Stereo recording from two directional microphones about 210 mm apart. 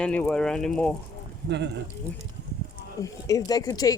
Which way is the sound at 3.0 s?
15° left (ahead or behind).